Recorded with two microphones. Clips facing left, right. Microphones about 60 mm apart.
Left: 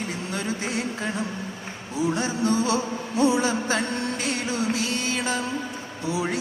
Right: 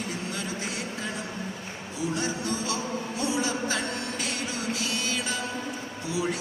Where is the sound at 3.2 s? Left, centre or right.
Left.